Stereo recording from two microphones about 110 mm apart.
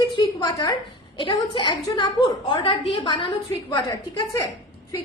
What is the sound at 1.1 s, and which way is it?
A woman's voice, 50° left (ahead or behind).